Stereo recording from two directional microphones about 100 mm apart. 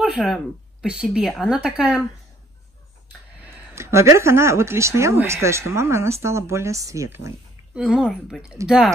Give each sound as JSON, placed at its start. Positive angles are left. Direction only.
{"t": 0.0, "sound": "speech", "side_deg": -10}
{"t": 3.7, "sound": "speech", "side_deg": -30}
{"t": 7.7, "sound": "speech", "side_deg": -10}